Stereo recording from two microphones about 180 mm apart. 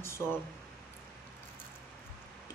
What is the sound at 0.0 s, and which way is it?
Speech, 15° left (ahead or behind).